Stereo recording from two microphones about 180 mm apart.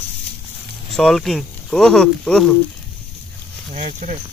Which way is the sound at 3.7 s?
40° right (ahead or behind).